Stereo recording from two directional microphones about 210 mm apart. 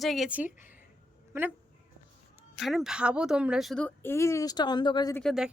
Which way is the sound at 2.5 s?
Centre (ahead or behind).